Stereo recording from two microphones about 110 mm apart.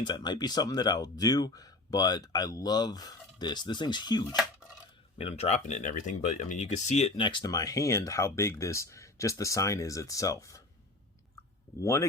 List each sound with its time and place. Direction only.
0.0 s speech: 45° left (ahead or behind)
5.1 s speech: 65° left (ahead or behind); by 7.1 s 90° left
7.2 s speech: 45° left (ahead or behind); by 10.6 s 30° left (ahead or behind)
11.8 s speech: 30° left (ahead or behind)